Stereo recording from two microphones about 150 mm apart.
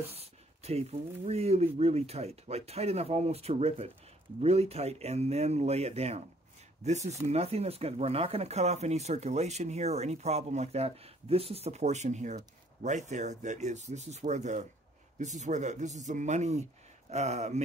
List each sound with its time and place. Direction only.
0.0 s speech: 40° right (ahead or behind)